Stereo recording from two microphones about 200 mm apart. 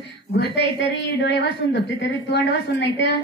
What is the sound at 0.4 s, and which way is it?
A woman's voice, 60° left (ahead or behind).